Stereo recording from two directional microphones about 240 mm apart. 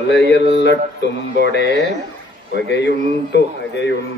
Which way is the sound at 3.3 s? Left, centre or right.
Left.